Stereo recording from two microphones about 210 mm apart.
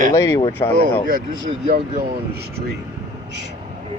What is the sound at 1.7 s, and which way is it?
Speech, 50° right (ahead or behind).